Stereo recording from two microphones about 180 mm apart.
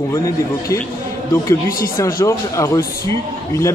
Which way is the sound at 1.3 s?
15° left (ahead or behind).